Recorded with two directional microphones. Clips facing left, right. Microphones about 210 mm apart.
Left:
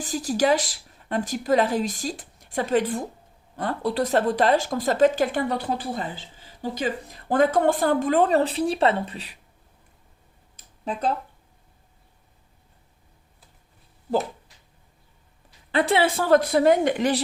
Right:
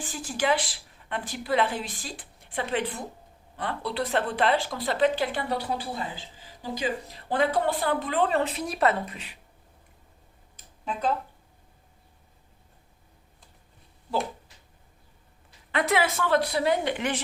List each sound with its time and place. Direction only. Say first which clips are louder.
0.0 s a woman's voice: left 6 dB; 40° left (ahead or behind)
15.7 s a woman's voice: left 4 dB; 30° left (ahead or behind)